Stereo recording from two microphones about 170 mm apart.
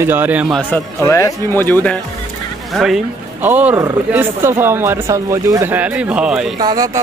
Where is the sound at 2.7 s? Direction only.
Centre (ahead or behind).